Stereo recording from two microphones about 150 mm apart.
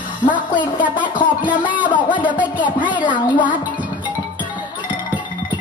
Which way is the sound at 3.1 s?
30° left (ahead or behind).